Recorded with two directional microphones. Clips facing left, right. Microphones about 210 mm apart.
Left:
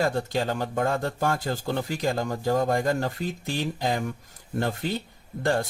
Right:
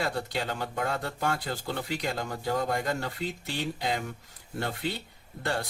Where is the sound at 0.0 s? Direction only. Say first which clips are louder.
Left 6 dB; 45° left (ahead or behind).